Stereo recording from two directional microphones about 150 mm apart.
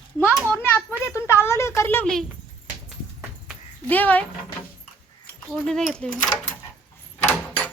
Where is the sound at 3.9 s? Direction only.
10° left (ahead or behind).